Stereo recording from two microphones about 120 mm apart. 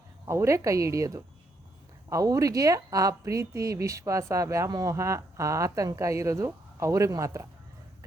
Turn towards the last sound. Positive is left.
turn(degrees=-25)  # may be behind; listen again after turning